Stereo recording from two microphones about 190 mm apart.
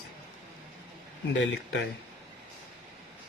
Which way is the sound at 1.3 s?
70° left (ahead or behind).